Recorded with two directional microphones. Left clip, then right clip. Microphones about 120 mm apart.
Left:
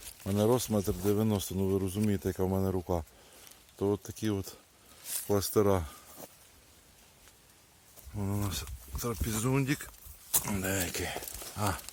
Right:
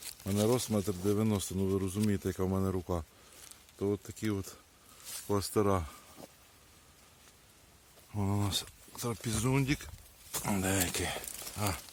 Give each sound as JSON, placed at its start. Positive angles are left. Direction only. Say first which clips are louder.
{"t": 0.3, "sound": "speech", "louder": "left 3 dB", "side_deg": 5}
{"t": 3.8, "sound": "speech", "louder": "left 3 dB", "side_deg": 15}
{"t": 8.1, "sound": "speech", "louder": "right 2 dB", "side_deg": -35}
{"t": 8.4, "sound": "speech", "louder": "right 3 dB", "side_deg": -15}
{"t": 10.6, "sound": "speech", "louder": "right 3 dB", "side_deg": -25}
{"t": 11.5, "sound": "speech", "louder": "left 3 dB", "side_deg": 5}